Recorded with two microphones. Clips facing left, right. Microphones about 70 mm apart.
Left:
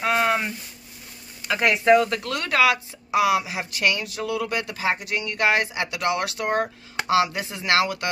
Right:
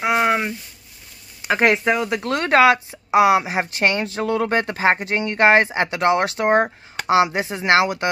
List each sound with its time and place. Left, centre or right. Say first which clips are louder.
0.0 s a sound: right 3 dB; centre
1.5 s speech: right 5 dB; right
1.9 s speech: left 3 dB; centre
2.2 s speech: right 6 dB; right